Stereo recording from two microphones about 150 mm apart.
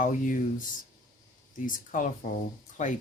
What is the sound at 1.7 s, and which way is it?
Speech, 60° left (ahead or behind).